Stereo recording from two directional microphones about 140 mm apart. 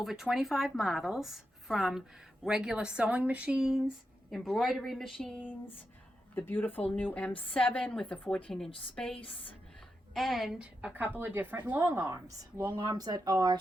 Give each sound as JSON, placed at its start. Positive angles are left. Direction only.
{"t": 0.0, "sound": "a woman's voice", "side_deg": 0}
{"t": 10.2, "sound": "a woman's voice", "side_deg": 0}